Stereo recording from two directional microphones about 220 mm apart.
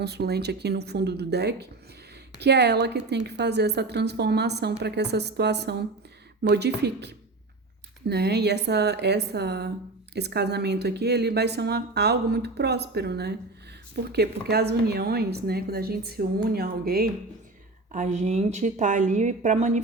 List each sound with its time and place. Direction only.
0.0 s speech: 50° right (ahead or behind)
17.9 s a woman's voice: 35° right (ahead or behind)